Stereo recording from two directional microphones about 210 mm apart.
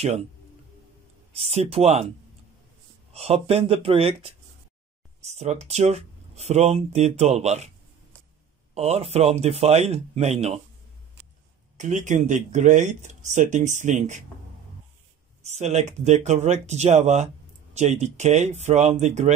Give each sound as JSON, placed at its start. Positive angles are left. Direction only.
{"t": 1.3, "sound": "speech", "side_deg": -30}
{"t": 3.1, "sound": "speech", "side_deg": -30}
{"t": 8.7, "sound": "speech", "side_deg": -30}
{"t": 11.7, "sound": "speech", "side_deg": -35}
{"t": 15.4, "sound": "speech", "side_deg": -30}